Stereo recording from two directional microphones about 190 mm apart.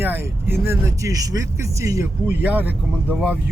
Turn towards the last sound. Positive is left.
turn(degrees=-5)  # may be behind; listen again after turning